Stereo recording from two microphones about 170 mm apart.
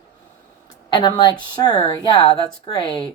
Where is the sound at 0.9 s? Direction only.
25° left (ahead or behind).